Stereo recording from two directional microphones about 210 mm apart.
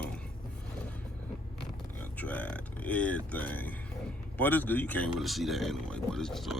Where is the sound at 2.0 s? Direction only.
10° left (ahead or behind).